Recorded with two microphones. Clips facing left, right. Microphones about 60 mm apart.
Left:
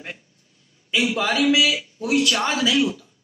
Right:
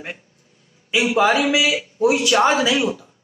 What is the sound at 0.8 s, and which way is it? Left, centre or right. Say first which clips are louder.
A man's voice: right 5 dB; centre.